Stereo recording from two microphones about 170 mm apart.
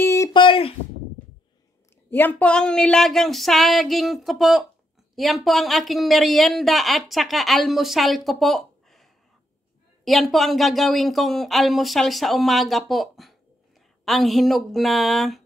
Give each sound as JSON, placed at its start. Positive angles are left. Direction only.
{"t": 0.0, "sound": "a sound", "side_deg": 15}
{"t": 0.3, "sound": "speech", "side_deg": 30}
{"t": 2.0, "sound": "speech", "side_deg": 10}